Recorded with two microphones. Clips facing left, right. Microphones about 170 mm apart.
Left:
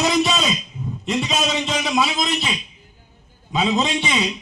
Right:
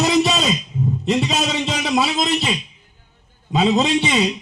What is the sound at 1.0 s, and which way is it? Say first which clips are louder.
A man's voice: right 1 dB; 35° right (ahead or behind).